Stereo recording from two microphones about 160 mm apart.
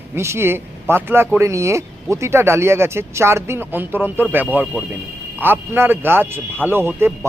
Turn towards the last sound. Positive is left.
turn(degrees=-15)  # may be behind; listen again after turning